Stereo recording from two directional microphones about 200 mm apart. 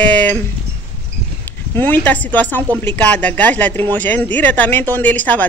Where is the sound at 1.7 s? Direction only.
10° left (ahead or behind).